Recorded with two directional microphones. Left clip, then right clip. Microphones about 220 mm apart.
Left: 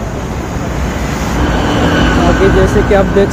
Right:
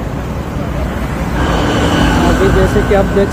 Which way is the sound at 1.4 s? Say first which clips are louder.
Even; 25° right (ahead or behind).